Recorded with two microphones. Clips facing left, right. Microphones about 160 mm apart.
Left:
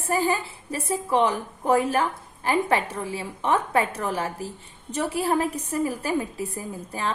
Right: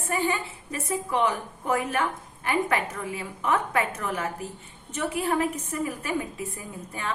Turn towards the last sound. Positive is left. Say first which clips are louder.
# left 5 dB
turn(degrees=35)  # may be behind; listen again after turning